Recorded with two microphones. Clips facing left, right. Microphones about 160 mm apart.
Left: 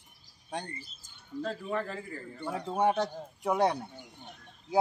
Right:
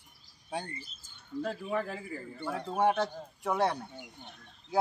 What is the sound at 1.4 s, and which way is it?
Speech, 10° right (ahead or behind).